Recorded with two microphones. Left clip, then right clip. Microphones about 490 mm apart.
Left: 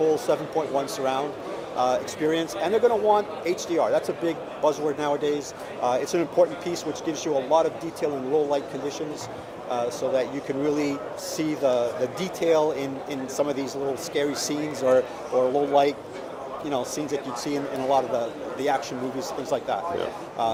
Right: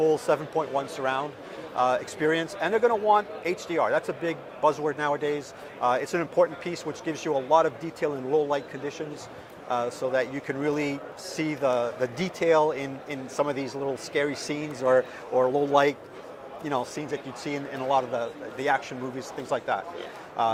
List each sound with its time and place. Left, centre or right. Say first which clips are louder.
0.1 s speech: left 1 dB; right